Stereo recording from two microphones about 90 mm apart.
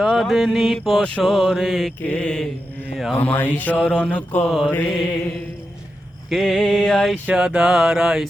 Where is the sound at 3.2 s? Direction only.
20° left (ahead or behind).